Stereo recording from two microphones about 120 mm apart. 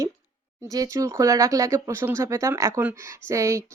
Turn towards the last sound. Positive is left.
turn(degrees=-25)  # may be behind; listen again after turning